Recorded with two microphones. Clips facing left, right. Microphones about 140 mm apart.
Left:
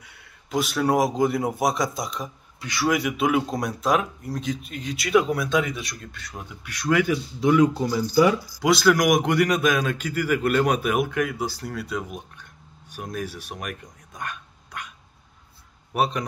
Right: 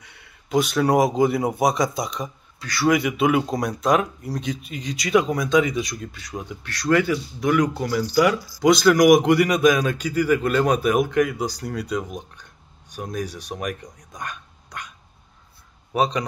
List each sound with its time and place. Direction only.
0.0 s a man's voice: centre (ahead or behind)
2.6 s speech: 15° left (ahead or behind)
2.9 s a man's voice: centre (ahead or behind)
6.7 s speech: 15° left (ahead or behind)
7.3 s speech: 25° left (ahead or behind)
8.5 s a man's voice: 5° left (ahead or behind)
15.9 s a man's voice: 5° left (ahead or behind)